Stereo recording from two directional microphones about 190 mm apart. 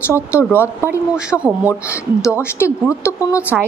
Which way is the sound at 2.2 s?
15° left (ahead or behind).